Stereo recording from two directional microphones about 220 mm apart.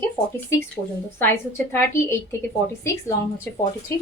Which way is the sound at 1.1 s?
10° left (ahead or behind).